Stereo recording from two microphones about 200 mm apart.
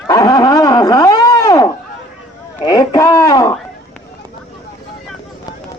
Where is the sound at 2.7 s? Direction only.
20° left (ahead or behind).